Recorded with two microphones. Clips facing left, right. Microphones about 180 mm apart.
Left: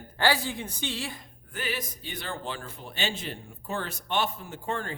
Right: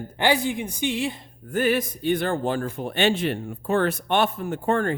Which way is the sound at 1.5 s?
50° right (ahead or behind).